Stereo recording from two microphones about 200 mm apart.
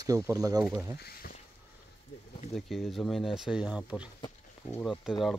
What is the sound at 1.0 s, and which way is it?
Speech, 50° left (ahead or behind).